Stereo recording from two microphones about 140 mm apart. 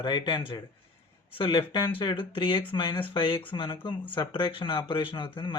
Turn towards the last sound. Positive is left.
turn(degrees=35)  # may be behind; listen again after turning